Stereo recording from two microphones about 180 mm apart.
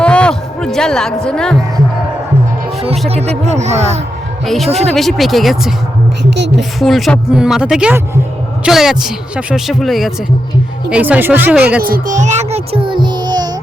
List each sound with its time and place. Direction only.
0.0 s music: 5° left (ahead or behind)
3.1 s speech: 35° right (ahead or behind)
4.4 s speech: centre (ahead or behind)
11.8 s a child's voice: 55° right (ahead or behind); by 13.5 s 25° right (ahead or behind)